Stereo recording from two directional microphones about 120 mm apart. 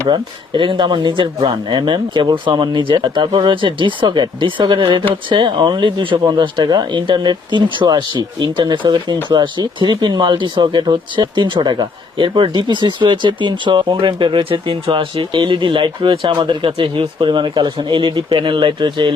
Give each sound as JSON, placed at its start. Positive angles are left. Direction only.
{"t": 0.1, "sound": "speech", "side_deg": -40}